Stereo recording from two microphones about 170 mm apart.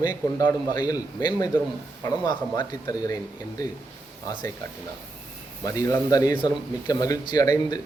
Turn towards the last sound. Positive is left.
turn(degrees=20)  # may be behind; listen again after turning